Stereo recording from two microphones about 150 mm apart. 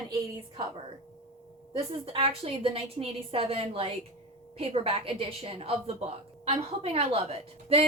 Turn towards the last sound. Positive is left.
turn(degrees=-40)  # may be behind; listen again after turning